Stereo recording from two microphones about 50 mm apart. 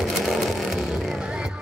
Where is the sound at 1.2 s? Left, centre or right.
Centre.